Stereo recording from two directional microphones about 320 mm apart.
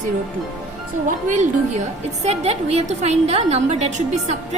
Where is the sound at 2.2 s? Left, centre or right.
Centre.